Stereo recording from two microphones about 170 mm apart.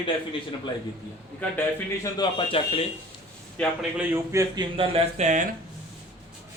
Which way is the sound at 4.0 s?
15° right (ahead or behind).